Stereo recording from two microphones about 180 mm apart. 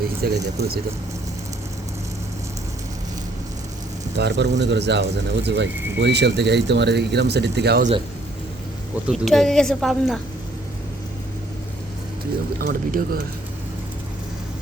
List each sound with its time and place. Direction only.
0.2 s speech: 55° right (ahead or behind)
4.2 s speech: 70° right (ahead or behind)
9.0 s speech: centre (ahead or behind)
12.5 s speech: 55° right (ahead or behind)